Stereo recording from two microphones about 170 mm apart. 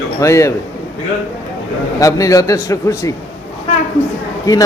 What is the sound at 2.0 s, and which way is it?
A man's voice, 20° left (ahead or behind).